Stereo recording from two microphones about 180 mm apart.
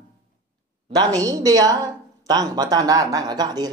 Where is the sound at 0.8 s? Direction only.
20° right (ahead or behind).